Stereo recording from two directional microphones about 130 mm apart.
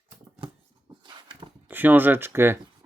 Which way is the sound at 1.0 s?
40° right (ahead or behind).